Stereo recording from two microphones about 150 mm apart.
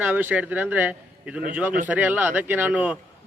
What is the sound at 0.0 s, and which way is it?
A man's voice, 10° right (ahead or behind).